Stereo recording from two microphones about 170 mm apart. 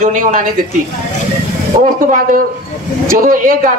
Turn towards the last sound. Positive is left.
turn(degrees=-55)  # may be behind; listen again after turning